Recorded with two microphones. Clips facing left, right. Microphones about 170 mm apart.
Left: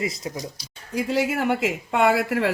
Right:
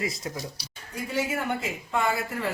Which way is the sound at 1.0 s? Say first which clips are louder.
Left 6 dB; 90° left.